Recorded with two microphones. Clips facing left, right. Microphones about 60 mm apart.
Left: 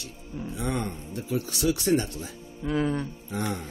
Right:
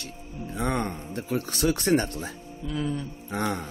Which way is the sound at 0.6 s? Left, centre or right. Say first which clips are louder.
Right 3 dB; right.